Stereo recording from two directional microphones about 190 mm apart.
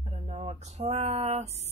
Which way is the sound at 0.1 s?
35° right (ahead or behind).